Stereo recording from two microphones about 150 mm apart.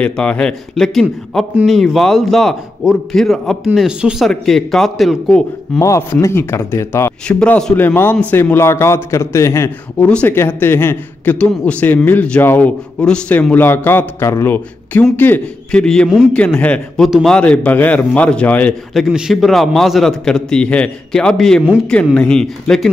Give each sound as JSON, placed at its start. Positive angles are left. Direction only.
{"t": 0.0, "sound": "a man's voice", "side_deg": 10}
{"t": 5.8, "sound": "a man's voice", "side_deg": 20}
{"t": 18.9, "sound": "a man's voice", "side_deg": -5}